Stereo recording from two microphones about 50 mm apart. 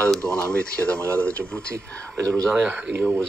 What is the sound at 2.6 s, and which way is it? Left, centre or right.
Speech, right.